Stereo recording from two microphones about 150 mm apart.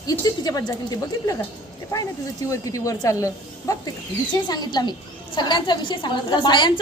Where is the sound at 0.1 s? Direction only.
25° left (ahead or behind).